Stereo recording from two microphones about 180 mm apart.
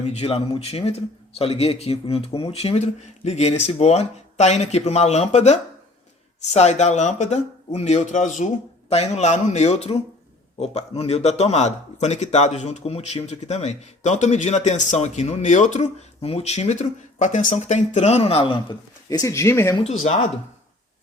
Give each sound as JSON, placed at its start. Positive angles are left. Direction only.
{"t": 0.0, "sound": "speech", "side_deg": 35}
{"t": 19.8, "sound": "speech", "side_deg": 35}